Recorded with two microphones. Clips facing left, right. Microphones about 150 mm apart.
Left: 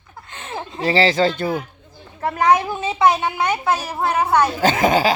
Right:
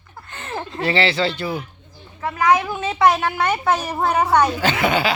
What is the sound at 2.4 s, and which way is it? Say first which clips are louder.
Snicker: left 1 dB; 35° left (ahead or behind).